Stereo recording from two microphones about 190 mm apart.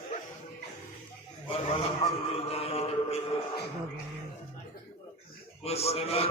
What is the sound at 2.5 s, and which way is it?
Mantra, 30° left (ahead or behind).